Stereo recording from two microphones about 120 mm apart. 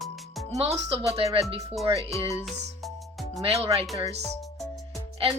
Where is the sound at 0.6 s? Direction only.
60° right (ahead or behind).